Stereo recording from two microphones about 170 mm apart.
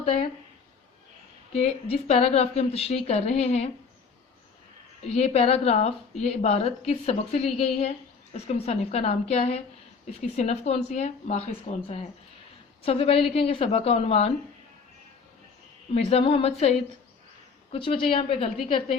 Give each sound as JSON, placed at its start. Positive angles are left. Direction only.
{"t": 0.0, "sound": "a woman's voice", "side_deg": 40}
{"t": 1.5, "sound": "a woman's voice", "side_deg": 35}
{"t": 5.0, "sound": "a woman's voice", "side_deg": 40}
{"t": 16.0, "sound": "a woman's voice", "side_deg": 35}